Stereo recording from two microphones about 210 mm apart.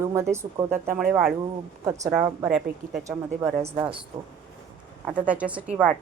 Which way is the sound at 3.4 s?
30° right (ahead or behind).